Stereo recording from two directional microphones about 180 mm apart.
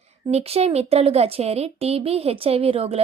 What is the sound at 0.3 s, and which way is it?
Speech, 35° right (ahead or behind).